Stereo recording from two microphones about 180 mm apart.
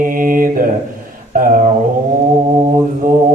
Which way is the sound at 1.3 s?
50° right (ahead or behind).